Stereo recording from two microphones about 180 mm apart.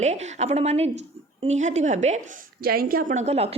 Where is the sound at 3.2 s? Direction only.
35° right (ahead or behind).